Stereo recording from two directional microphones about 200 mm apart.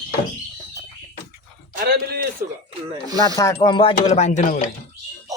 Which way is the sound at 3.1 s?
20° right (ahead or behind).